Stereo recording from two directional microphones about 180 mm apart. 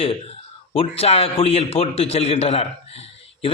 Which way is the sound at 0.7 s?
35° left (ahead or behind).